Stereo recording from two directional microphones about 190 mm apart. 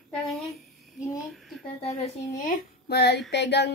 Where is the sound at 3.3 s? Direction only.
65° left (ahead or behind).